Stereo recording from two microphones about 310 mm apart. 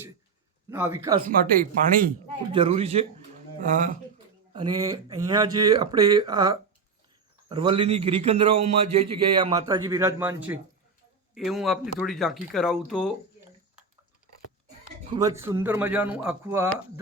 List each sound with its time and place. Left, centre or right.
0.7 s speech: centre
1.4 s a man's voice: right
4.8 s a man's voice: centre
15.1 s speech: centre